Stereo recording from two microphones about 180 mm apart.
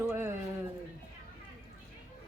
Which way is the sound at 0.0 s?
15° right (ahead or behind).